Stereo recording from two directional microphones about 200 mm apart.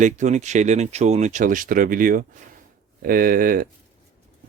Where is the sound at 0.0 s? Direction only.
35° right (ahead or behind).